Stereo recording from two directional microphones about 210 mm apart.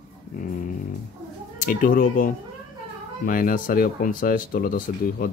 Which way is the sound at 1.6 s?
40° left (ahead or behind).